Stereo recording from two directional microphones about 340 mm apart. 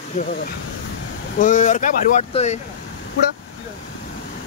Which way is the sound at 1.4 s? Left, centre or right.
Left.